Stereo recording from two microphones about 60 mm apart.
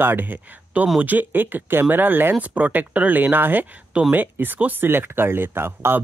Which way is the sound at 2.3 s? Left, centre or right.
Right.